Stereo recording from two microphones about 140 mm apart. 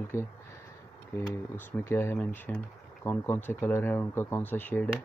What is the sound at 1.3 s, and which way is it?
Speech, 15° left (ahead or behind).